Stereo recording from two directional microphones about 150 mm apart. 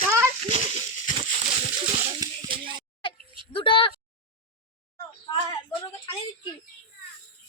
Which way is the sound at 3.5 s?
35° left (ahead or behind).